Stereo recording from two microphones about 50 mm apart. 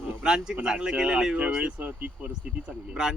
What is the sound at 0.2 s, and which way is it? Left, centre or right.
Speech, centre.